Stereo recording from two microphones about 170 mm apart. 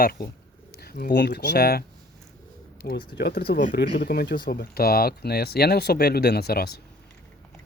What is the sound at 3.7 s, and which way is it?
A man's voice, 85° left.